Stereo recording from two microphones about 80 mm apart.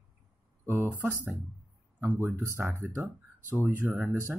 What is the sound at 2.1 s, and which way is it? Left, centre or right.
Speech, right.